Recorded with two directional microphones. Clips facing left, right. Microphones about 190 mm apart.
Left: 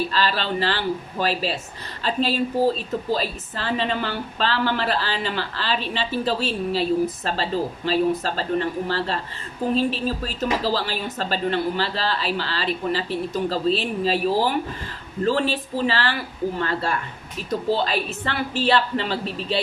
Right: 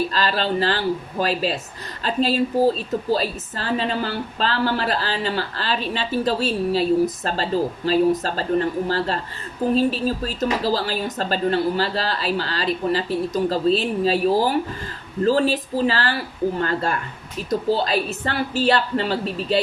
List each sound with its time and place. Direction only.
0.1 s a woman's voice: 40° right (ahead or behind)
10.8 s a woman's voice: 45° right (ahead or behind)